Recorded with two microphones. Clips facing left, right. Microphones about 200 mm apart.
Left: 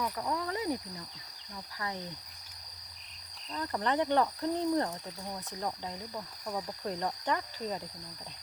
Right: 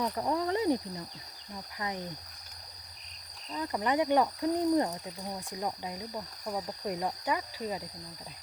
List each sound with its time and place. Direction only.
0.0 s speech: 30° right (ahead or behind)
3.5 s speech: 10° right (ahead or behind)